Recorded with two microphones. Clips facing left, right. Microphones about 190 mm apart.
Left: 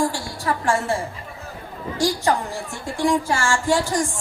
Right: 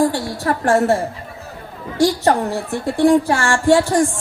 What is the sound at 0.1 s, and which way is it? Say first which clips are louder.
Speech: right 5 dB; 60° right (ahead or behind).